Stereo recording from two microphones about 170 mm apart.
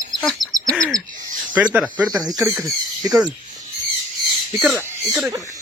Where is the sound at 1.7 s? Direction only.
10° right (ahead or behind).